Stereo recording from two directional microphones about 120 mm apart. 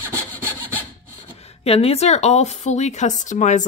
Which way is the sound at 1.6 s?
55° left (ahead or behind).